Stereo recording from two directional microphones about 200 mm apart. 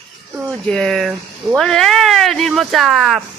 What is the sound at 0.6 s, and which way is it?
Speech, 5° left (ahead or behind).